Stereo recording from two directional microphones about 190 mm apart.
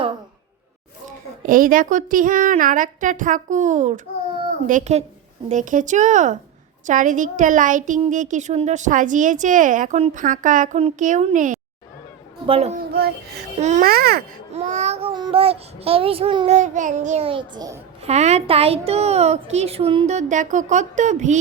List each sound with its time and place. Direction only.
1.4 s a woman's voice: 45° right (ahead or behind)
13.8 s a child's voice: 55° right (ahead or behind)
14.5 s a woman's voice: 35° right (ahead or behind)
16.5 s a woman's voice: 40° right (ahead or behind); by 17.7 s 20° right (ahead or behind)
18.0 s a woman's voice: 35° right (ahead or behind)